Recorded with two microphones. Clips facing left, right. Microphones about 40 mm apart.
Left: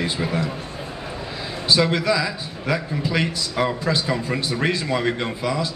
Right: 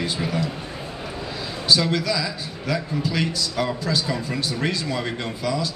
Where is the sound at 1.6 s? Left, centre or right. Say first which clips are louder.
Left 2 dB; left.